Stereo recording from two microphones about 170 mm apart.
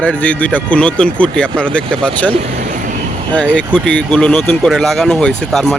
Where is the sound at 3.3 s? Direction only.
10° left (ahead or behind).